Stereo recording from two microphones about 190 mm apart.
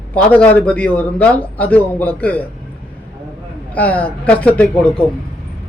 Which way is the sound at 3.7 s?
10° left (ahead or behind).